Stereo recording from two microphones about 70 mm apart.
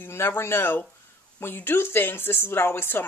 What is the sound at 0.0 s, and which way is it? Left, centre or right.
Speech, left.